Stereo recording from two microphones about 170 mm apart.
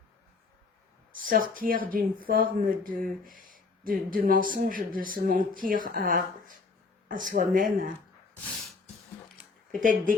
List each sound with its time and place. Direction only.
1.2 s speech: 55° right (ahead or behind)
9.8 s speech: 50° right (ahead or behind)